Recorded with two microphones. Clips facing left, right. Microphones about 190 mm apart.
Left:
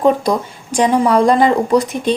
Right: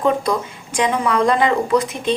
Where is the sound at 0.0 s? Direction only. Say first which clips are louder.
Left 4 dB; 35° left (ahead or behind).